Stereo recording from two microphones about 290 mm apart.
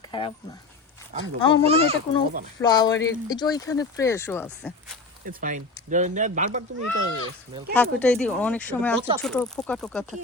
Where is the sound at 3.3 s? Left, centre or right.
Centre.